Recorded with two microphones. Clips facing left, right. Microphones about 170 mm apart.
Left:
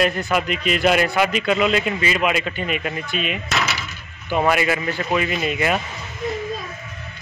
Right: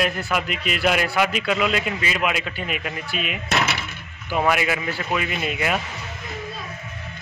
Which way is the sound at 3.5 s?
55° right (ahead or behind).